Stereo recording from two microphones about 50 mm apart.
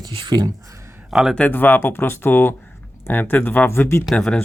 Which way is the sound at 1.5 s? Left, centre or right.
Left.